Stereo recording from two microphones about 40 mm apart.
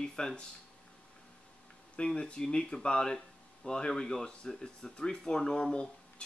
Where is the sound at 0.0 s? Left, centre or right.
Centre.